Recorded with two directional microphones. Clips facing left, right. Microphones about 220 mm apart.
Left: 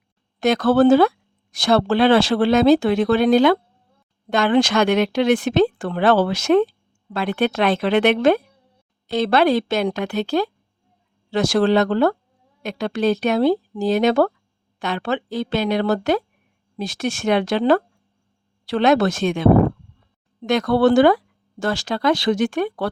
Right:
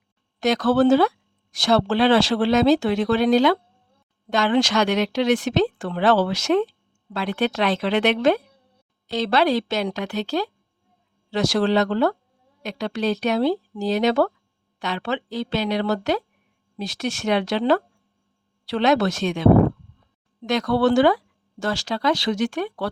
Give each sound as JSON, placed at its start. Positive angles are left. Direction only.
{"t": 0.3, "sound": "speech", "side_deg": 55}
{"t": 20.5, "sound": "speech", "side_deg": 55}